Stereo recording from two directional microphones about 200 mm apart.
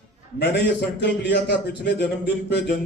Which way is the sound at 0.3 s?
60° left (ahead or behind).